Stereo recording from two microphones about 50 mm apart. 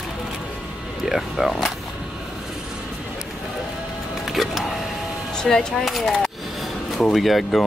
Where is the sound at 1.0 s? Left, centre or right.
Centre.